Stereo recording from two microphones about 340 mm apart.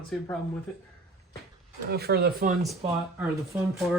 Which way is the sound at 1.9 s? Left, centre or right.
Right.